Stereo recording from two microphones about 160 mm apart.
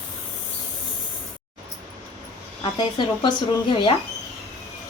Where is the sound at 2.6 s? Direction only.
30° left (ahead or behind).